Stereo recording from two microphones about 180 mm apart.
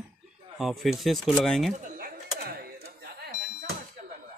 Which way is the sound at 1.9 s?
55° right (ahead or behind).